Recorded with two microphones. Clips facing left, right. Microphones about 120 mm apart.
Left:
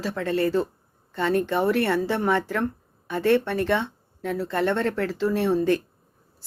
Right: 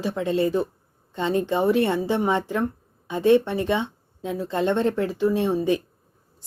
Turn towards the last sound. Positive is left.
turn(degrees=-15)  # may be behind; listen again after turning